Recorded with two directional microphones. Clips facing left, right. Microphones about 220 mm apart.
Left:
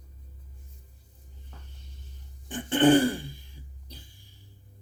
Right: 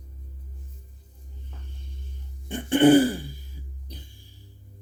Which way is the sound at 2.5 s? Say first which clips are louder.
Right 4 dB; 10° right (ahead or behind).